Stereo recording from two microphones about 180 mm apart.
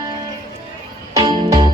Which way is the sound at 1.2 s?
25° right (ahead or behind).